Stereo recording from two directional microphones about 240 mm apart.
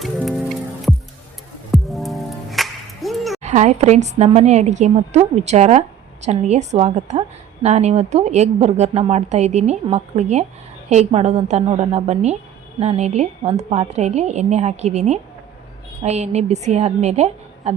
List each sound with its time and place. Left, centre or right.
0.0 s music: centre
3.4 s a woman's voice: right